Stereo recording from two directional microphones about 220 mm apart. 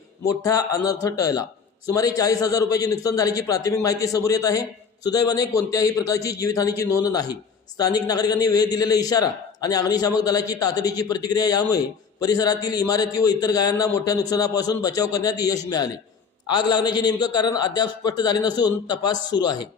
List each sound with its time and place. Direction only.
0.3 s a man's voice: 15° left (ahead or behind)